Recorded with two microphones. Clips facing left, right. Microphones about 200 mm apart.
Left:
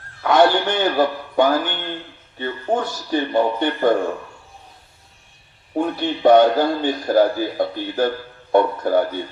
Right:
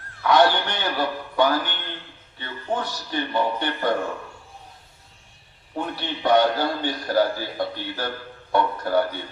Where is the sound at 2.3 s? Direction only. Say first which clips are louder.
Left 6 dB; 45° left (ahead or behind).